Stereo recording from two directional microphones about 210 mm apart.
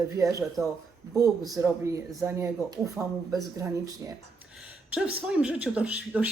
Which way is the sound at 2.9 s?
Centre (ahead or behind).